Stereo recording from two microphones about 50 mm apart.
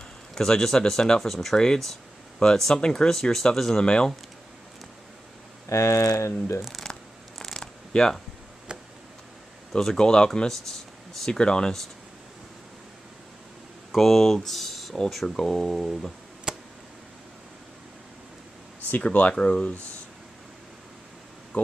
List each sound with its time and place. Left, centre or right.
0.3 s speech: centre
5.7 s speech: left
6.8 s purr: centre
7.6 s a sound: centre
8.7 s tick: centre
9.7 s speech: centre
9.9 s speech: centre
13.9 s speech: centre
16.5 s a sound: centre
18.9 s speech: left
19.3 s speech: left